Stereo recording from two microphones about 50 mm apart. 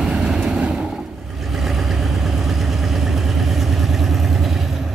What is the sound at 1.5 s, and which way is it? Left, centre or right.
Vehicle, centre.